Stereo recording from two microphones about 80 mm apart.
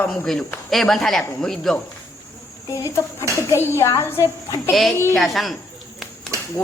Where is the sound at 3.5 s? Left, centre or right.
Left.